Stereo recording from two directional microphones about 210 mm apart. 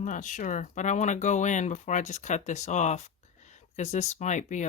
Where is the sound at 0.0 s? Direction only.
35° left (ahead or behind).